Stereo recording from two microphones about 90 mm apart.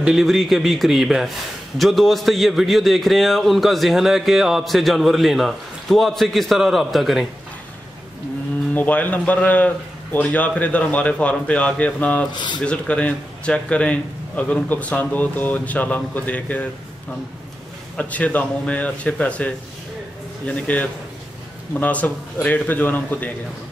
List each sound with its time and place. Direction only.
0.0 s a man's voice: 5° right (ahead or behind)
8.7 s a man's voice: 20° left (ahead or behind)
17.9 s a man's voice: 15° left (ahead or behind)